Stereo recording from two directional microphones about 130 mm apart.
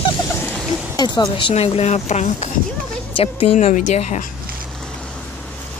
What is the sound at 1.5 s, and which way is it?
Speech, 50° left (ahead or behind).